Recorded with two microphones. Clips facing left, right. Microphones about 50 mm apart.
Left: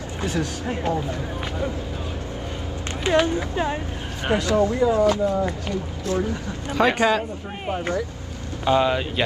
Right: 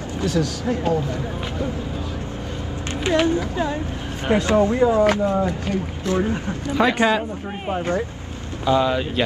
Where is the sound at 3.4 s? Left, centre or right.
Left.